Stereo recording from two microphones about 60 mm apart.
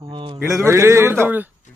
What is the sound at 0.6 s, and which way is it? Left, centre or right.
Speech, right.